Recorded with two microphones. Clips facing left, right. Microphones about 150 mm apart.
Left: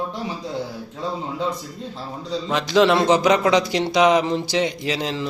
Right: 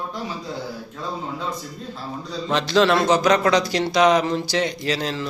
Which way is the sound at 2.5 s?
10° left (ahead or behind).